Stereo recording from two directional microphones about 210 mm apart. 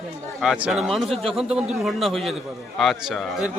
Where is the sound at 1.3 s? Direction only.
5° right (ahead or behind).